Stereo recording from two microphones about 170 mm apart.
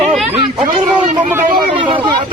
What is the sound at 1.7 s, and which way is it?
Speech, 30° right (ahead or behind).